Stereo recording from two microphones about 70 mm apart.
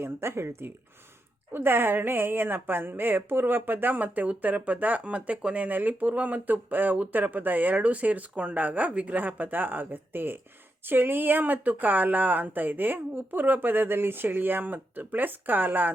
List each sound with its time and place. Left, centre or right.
0.0 s speech: right